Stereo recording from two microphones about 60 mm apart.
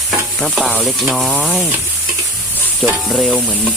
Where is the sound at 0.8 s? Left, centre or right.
Centre.